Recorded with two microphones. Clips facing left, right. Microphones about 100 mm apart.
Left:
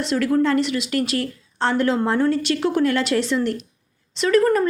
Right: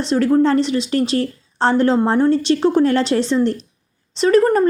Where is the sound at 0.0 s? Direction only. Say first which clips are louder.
Right 4 dB; 30° right (ahead or behind).